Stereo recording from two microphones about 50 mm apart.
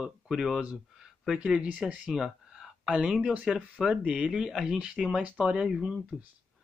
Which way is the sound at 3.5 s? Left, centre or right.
Centre.